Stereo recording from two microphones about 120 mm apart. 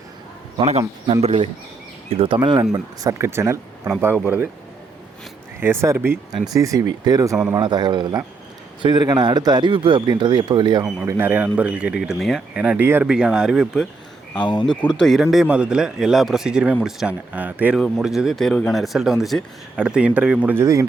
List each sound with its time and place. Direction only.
0.6 s speech: 65° right (ahead or behind); by 2.6 s 40° right (ahead or behind)
2.7 s speech: 30° right (ahead or behind)
5.5 s speech: 20° right (ahead or behind); by 10.8 s 35° right (ahead or behind)
11.0 s speech: 20° right (ahead or behind); by 12.6 s 5° right (ahead or behind)
12.6 s speech: 15° right (ahead or behind)
14.3 s speech: 40° left (ahead or behind)
15.0 s speech: centre (ahead or behind)
17.7 s speech: 5° left (ahead or behind); by 20.7 s 15° right (ahead or behind)